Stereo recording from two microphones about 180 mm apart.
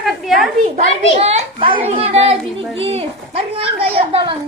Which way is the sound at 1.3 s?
30° right (ahead or behind).